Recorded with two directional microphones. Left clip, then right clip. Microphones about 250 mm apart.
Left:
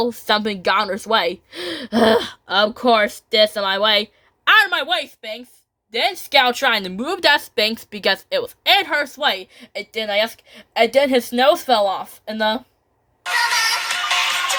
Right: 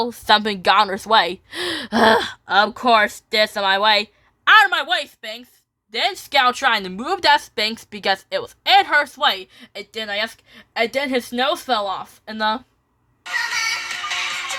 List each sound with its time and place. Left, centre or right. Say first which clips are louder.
0.0 s a woman's voice: right 2 dB; centre
13.2 s music: left 4 dB; left